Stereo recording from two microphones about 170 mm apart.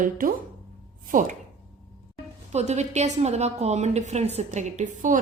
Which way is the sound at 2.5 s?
40° right (ahead or behind).